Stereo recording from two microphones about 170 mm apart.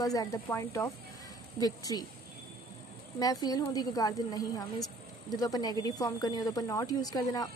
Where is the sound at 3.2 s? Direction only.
20° left (ahead or behind).